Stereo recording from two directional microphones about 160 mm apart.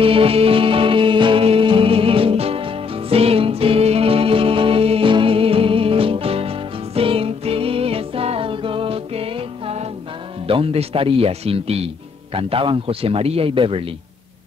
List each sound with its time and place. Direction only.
0.0 s music: 35° right (ahead or behind)
10.4 s a man's voice: 35° right (ahead or behind)